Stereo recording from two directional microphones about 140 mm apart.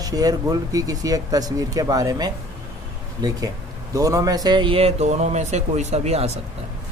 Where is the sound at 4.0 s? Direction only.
25° right (ahead or behind).